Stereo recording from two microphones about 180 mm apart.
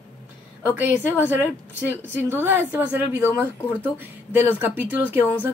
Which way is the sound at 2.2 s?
15° right (ahead or behind).